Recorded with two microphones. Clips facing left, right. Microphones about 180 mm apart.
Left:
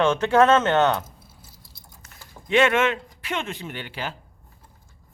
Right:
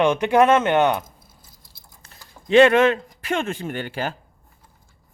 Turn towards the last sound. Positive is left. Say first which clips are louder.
# right 6 dB
turn(degrees=-45)  # may be behind; listen again after turning